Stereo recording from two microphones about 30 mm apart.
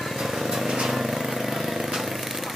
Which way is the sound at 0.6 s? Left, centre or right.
Centre.